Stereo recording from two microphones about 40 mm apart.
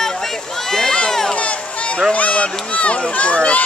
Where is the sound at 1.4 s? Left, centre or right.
Left.